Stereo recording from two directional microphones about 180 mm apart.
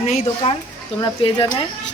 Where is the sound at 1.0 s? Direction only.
25° left (ahead or behind).